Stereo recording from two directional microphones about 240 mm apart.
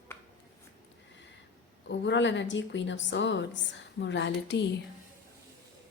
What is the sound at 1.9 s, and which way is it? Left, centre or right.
Speech, left.